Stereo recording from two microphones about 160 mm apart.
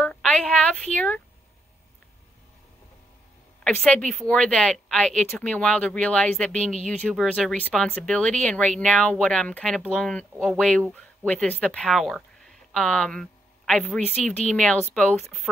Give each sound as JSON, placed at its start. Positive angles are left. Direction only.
{"t": 0.0, "sound": "speech", "side_deg": 5}
{"t": 3.6, "sound": "speech", "side_deg": 5}